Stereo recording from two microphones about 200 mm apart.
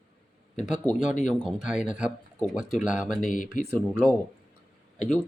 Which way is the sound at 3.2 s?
40° left (ahead or behind).